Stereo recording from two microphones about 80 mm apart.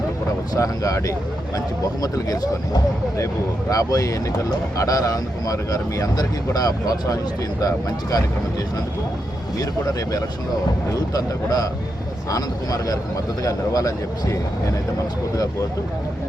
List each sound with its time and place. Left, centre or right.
0.5 s speech: left